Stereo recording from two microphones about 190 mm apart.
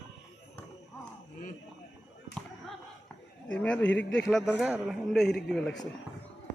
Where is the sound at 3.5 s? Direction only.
5° left (ahead or behind).